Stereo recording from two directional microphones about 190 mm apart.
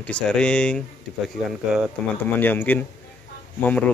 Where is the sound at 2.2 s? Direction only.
10° left (ahead or behind).